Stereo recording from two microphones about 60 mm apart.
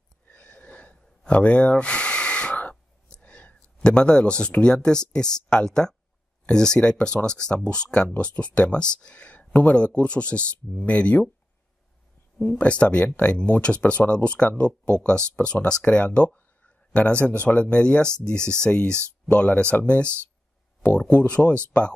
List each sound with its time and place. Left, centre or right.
0.3 s a sound: centre
2.7 s whispering: centre
3.8 s speech: centre
12.5 s speech: left
16.6 s a sound: left
17.4 s speech: left